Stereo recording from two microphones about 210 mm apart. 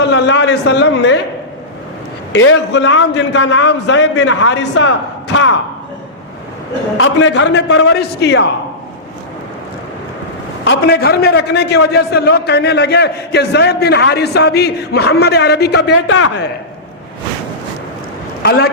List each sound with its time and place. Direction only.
0.1 s a man's voice: 55° left (ahead or behind)
2.3 s a man's voice: 60° left (ahead or behind)
7.0 s a man's voice: 60° left (ahead or behind)
10.7 s a man's voice: 50° left (ahead or behind); by 16.4 s 65° left (ahead or behind)
18.4 s a man's voice: 50° left (ahead or behind)